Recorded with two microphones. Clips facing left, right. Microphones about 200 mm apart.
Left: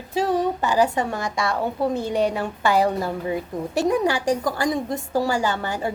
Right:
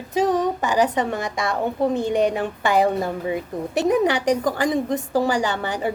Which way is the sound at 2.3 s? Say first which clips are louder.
Even; 15° right (ahead or behind).